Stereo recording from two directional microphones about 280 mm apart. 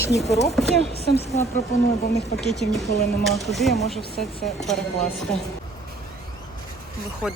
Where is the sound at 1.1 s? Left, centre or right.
Left.